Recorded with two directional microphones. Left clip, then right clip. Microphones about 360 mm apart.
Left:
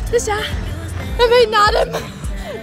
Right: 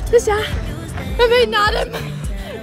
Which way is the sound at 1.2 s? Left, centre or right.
Centre.